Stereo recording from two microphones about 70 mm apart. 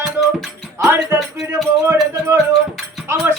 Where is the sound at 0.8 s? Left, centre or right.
Right.